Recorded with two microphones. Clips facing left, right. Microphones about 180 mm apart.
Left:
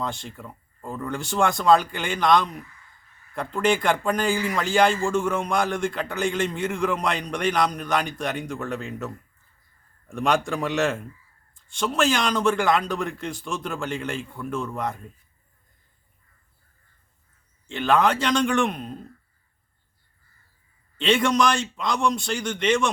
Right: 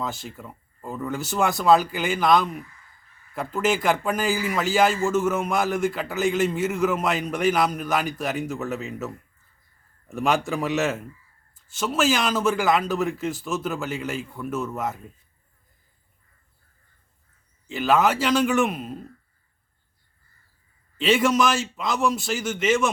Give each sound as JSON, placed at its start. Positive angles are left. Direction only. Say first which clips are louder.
{"t": 0.0, "sound": "a man's voice", "louder": "even", "side_deg": -5}
{"t": 17.7, "sound": "a man's voice", "louder": "even", "side_deg": -5}
{"t": 21.0, "sound": "a man's voice", "louder": "right 1 dB", "side_deg": -5}